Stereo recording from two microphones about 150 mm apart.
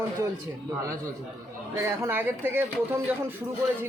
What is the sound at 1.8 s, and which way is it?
Speech, 15° right (ahead or behind).